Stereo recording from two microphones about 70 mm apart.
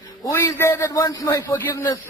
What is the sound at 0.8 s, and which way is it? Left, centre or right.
Speech, left.